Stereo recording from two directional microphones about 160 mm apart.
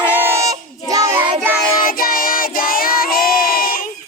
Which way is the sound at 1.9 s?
65° left (ahead or behind).